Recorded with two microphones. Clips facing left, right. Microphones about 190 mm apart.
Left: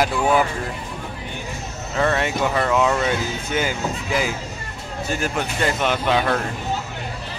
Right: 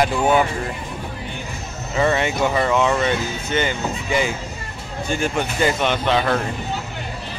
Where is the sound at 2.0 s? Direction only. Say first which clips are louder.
Right 2 dB; centre (ahead or behind).